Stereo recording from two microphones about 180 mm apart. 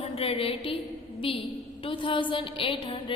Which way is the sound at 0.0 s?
35° left (ahead or behind).